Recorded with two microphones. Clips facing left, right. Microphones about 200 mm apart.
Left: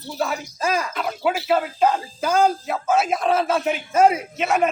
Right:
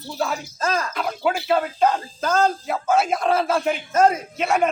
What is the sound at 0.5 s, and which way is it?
Speech, 10° left (ahead or behind).